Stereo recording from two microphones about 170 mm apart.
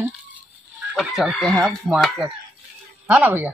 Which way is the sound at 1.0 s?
Centre (ahead or behind).